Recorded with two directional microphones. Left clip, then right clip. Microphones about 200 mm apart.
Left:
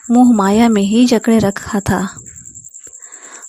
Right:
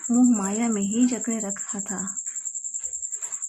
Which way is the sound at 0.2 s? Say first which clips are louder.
Left 13 dB; 45° left (ahead or behind).